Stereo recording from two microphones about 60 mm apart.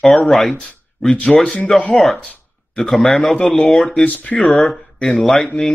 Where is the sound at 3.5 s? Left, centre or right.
Left.